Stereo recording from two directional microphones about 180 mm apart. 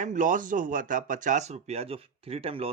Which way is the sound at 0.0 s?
45° right (ahead or behind).